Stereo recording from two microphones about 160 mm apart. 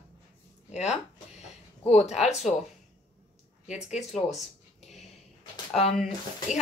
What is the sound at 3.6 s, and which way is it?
Speech, 45° left (ahead or behind).